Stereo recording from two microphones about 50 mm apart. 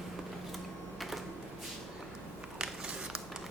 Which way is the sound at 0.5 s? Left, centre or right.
Centre.